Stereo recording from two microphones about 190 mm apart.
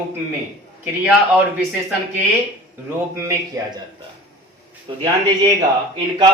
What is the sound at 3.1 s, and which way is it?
Speech, 15° right (ahead or behind).